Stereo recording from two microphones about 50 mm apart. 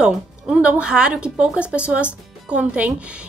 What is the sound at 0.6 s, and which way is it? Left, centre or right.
A woman's voice, right.